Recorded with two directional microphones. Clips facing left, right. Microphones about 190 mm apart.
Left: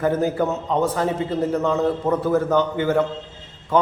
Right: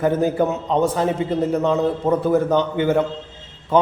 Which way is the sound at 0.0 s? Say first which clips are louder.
Right 2 dB; 20° right (ahead or behind).